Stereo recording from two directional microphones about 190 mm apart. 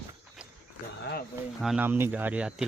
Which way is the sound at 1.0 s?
60° left (ahead or behind).